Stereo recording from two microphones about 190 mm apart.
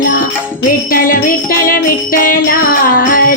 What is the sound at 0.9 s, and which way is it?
Music, 45° left (ahead or behind).